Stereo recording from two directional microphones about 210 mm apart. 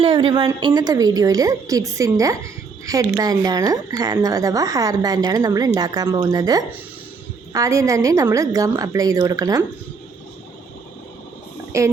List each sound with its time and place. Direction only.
0.0 s speech: 25° right (ahead or behind)
11.7 s speech: 15° right (ahead or behind)